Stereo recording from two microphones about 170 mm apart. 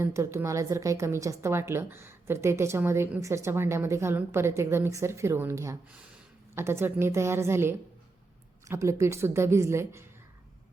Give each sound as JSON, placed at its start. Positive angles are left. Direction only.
{"t": 0.0, "sound": "a woman's voice", "side_deg": -15}